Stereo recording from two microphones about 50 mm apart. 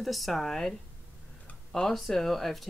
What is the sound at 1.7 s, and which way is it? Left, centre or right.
Speech, centre.